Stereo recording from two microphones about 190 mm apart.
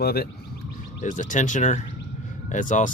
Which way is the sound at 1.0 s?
40° left (ahead or behind).